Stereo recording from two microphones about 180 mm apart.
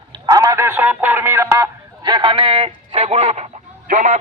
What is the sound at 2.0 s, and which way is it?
Speech, 25° right (ahead or behind).